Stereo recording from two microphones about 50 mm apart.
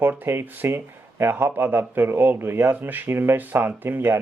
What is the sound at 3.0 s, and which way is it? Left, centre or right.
Speech, right.